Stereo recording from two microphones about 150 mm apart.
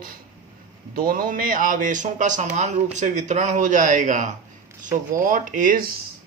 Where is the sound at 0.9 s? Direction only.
70° right (ahead or behind).